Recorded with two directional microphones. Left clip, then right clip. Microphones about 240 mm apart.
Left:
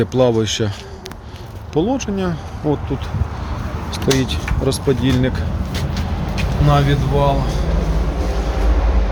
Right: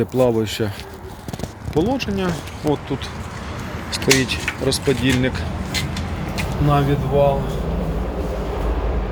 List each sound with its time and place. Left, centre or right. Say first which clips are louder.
0.0 s speech: left 2 dB; centre
1.7 s speech: left 2 dB; centre
3.9 s speech: right 1 dB; centre